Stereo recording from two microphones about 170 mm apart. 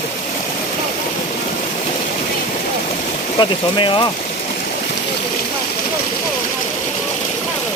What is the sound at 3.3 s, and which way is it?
Speech, 30° left (ahead or behind).